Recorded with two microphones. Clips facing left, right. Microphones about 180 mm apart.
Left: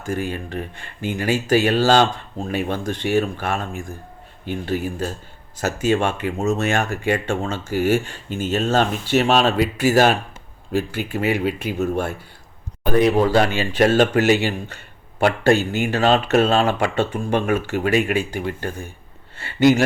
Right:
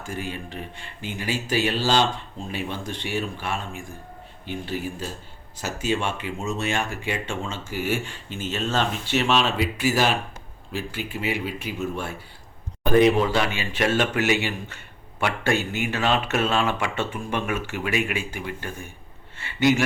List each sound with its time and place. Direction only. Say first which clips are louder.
0.1 s speech: left 8 dB; 50° left (ahead or behind)
13.1 s speech: left 6 dB; 40° left (ahead or behind)